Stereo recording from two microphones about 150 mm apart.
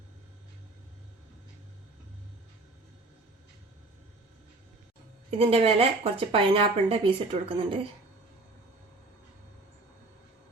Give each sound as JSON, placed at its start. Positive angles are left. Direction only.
{"t": 5.4, "sound": "speech", "side_deg": -40}